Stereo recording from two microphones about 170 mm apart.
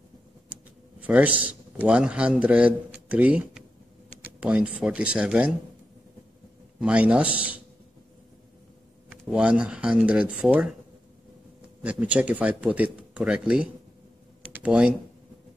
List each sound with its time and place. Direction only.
1.0 s a man's voice: 10° right (ahead or behind)
6.8 s speech: 5° right (ahead or behind)
9.1 s speech: 5° right (ahead or behind)
11.8 s speech: 10° right (ahead or behind)